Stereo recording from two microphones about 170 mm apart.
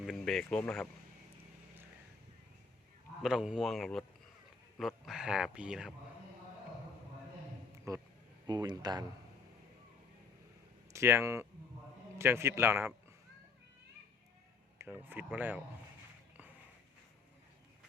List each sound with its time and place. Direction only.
0.0 s speech: centre (ahead or behind)
3.2 s speech: 5° right (ahead or behind)
7.9 s speech: 20° right (ahead or behind)
10.9 s speech: 15° right (ahead or behind)
14.8 s speech: 10° right (ahead or behind)